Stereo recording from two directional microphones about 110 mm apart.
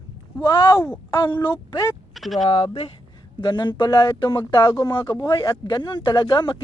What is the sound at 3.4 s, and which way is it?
Speech, 45° left (ahead or behind).